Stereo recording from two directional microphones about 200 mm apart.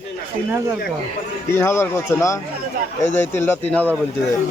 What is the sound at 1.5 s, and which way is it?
A man's voice, 15° left (ahead or behind).